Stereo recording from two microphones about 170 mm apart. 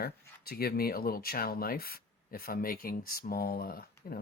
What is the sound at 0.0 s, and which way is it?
Speech, 65° left (ahead or behind).